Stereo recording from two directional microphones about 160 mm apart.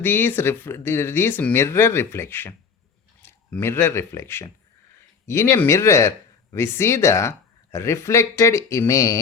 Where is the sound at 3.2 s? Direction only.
15° left (ahead or behind).